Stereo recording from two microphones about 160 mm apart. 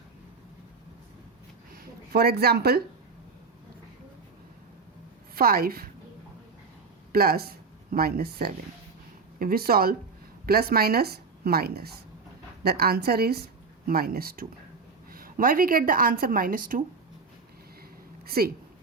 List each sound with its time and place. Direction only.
1.7 s speech: 75° right (ahead or behind)
5.3 s a woman's voice: 70° right (ahead or behind)
7.1 s a woman's voice: 70° right (ahead or behind)
18.3 s a woman's voice: 70° right (ahead or behind)